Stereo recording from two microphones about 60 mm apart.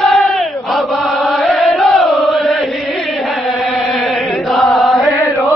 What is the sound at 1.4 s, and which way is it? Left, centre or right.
Chant, centre.